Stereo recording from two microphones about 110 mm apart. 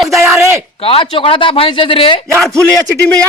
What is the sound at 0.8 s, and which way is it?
Speech, 55° left (ahead or behind).